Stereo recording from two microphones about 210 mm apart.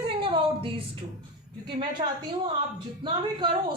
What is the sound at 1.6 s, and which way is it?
A woman's voice, 20° right (ahead or behind).